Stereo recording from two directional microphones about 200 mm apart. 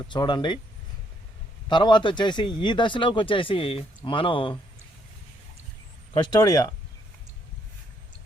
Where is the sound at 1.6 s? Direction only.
25° left (ahead or behind).